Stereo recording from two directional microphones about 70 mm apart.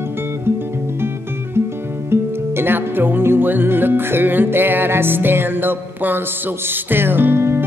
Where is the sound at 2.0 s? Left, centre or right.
Right.